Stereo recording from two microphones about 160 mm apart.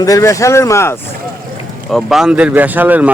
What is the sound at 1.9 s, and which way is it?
Speech, centre (ahead or behind).